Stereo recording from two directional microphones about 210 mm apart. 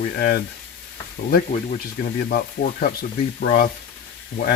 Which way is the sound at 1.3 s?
45° left (ahead or behind).